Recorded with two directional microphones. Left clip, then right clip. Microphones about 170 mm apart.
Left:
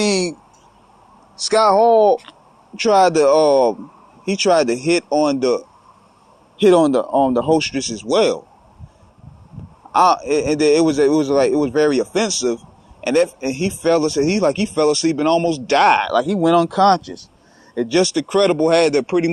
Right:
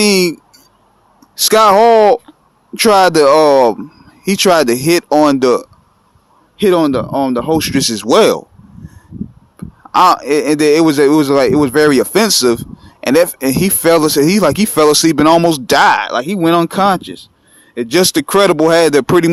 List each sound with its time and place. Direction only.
1.5 s speech: 55° right (ahead or behind)
2.8 s speech: 45° right (ahead or behind)
6.6 s speech: 30° right (ahead or behind)
7.8 s speech: 50° right (ahead or behind)
9.9 s speech: 40° right (ahead or behind)